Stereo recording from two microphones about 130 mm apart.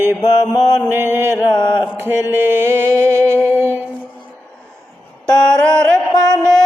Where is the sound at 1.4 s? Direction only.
35° left (ahead or behind).